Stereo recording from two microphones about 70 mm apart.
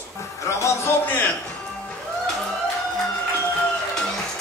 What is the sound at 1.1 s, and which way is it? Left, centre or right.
Music, left.